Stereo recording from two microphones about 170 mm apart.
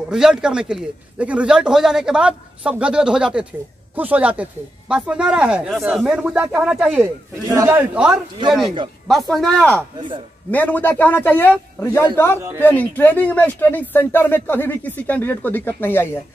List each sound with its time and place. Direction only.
0.1 s a man's voice: 5° right (ahead or behind)
7.4 s a man's voice: 20° right (ahead or behind); by 9.8 s 5° left (ahead or behind)
9.9 s speech: 30° right (ahead or behind)
10.5 s speech: 10° left (ahead or behind)